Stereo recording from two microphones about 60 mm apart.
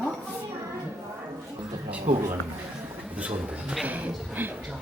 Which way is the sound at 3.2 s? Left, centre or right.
Right.